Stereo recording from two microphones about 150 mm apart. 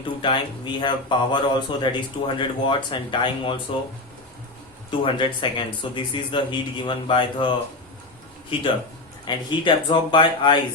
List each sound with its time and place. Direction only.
0.2 s speech: 30° left (ahead or behind)
4.9 s speech: 35° left (ahead or behind)
8.5 s speech: 35° left (ahead or behind)